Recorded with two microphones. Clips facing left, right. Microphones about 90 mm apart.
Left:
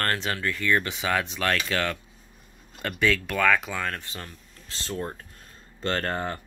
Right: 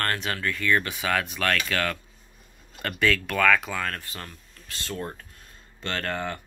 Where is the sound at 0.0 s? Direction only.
25° left (ahead or behind).